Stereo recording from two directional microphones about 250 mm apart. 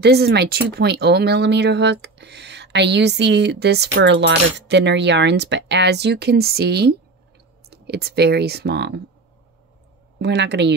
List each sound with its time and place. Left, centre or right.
0.0 s speech: right
10.1 s speech: right